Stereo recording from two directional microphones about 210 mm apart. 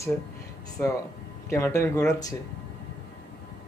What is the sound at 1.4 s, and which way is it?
Speech, 15° left (ahead or behind).